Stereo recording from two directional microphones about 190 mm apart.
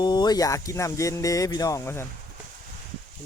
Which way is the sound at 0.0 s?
20° left (ahead or behind).